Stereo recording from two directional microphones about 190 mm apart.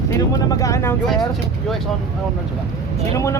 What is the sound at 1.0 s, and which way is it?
Speech, centre (ahead or behind).